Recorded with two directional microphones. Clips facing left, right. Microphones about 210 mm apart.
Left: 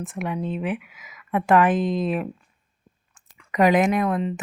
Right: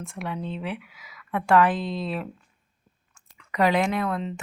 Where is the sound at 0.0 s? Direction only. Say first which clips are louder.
Left 5 dB; 20° left (ahead or behind).